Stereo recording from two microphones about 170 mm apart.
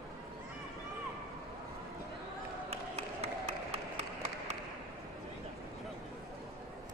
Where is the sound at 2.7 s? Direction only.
40° right (ahead or behind).